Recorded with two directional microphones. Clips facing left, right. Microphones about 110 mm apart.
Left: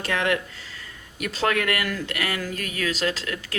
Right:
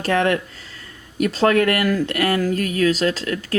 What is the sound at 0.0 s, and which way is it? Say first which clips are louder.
Speech: right 6 dB; 35° right (ahead or behind).